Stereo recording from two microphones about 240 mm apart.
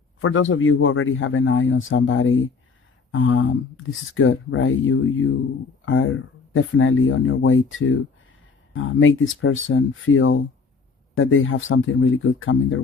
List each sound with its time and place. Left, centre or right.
0.2 s a man's voice: left